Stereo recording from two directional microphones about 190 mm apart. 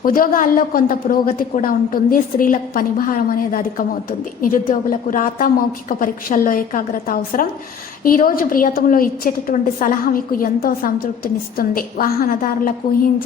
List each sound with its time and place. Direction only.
0.0 s a woman's voice: 50° left (ahead or behind)